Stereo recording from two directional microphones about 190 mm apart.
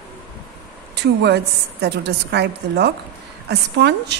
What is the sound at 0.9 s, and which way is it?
A woman's voice, 60° right (ahead or behind).